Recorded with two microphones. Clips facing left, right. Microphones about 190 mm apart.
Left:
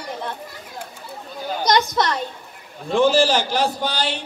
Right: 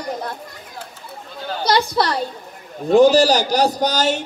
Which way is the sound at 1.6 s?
30° right (ahead or behind).